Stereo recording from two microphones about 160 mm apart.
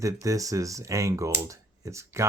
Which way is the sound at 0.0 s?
20° right (ahead or behind).